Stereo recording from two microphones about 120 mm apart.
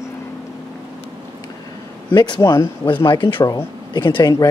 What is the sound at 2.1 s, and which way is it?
Speech, 35° left (ahead or behind).